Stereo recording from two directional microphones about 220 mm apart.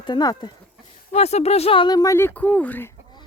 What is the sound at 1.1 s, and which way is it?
Speech, 30° left (ahead or behind).